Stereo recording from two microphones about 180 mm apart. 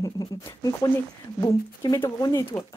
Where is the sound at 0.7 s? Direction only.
20° left (ahead or behind).